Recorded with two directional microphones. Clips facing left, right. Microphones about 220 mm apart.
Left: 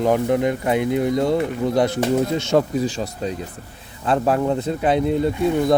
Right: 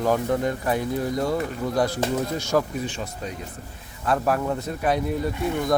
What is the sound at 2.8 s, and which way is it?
Speech, 35° left (ahead or behind).